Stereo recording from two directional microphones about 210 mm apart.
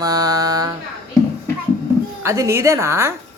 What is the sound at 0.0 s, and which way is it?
Mantra, 15° right (ahead or behind).